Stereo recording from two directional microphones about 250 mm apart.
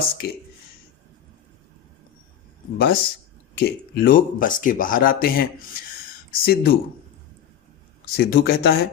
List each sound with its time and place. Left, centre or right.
2.7 s speech: left
8.1 s speech: left